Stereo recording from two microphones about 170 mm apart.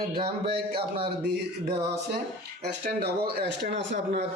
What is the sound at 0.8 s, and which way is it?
Speech, 30° right (ahead or behind).